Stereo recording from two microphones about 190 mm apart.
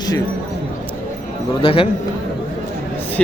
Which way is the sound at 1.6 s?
30° left (ahead or behind).